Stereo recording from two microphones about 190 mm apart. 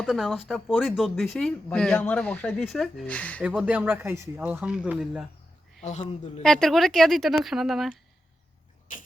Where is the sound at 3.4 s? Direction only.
5° right (ahead or behind).